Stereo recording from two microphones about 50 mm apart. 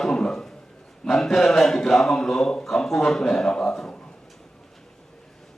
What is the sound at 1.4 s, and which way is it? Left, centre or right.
A man's voice, centre.